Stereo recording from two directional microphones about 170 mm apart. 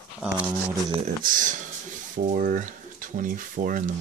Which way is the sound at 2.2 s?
50° right (ahead or behind).